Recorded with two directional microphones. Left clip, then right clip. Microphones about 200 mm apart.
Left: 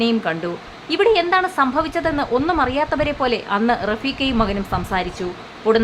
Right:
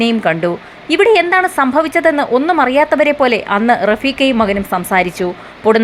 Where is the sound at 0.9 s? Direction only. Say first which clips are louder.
Right 6 dB; 20° right (ahead or behind).